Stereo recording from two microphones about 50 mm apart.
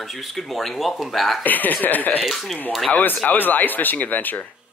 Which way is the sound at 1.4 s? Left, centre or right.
Left.